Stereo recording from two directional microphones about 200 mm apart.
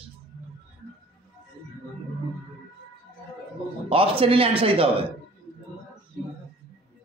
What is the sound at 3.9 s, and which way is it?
A man's voice, 25° right (ahead or behind).